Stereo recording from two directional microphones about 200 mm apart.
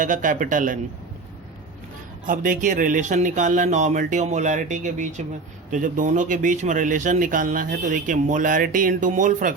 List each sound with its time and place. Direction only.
0.0 s speech: 40° right (ahead or behind)
2.2 s speech: 45° right (ahead or behind)